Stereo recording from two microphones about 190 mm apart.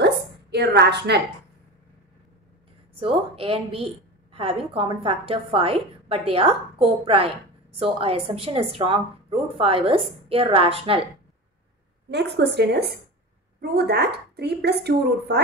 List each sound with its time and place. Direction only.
0.0 s a sound: 60° right (ahead or behind)
2.9 s a woman's voice: 30° right (ahead or behind)
12.1 s a woman's voice: 65° right (ahead or behind)